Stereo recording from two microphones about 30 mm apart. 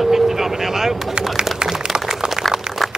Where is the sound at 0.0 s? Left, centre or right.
Centre.